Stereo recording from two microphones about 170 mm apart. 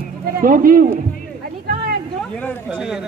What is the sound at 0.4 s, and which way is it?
Speech, 55° right (ahead or behind).